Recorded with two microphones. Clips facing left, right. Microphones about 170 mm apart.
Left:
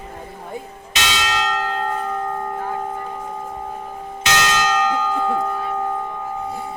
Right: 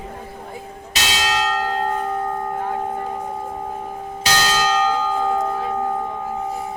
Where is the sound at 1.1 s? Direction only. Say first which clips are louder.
Right 2 dB; 35° right (ahead or behind).